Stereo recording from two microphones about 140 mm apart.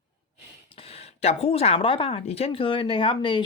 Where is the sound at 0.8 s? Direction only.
45° left (ahead or behind).